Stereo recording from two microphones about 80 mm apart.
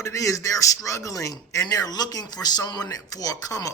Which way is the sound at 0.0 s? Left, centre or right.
Left.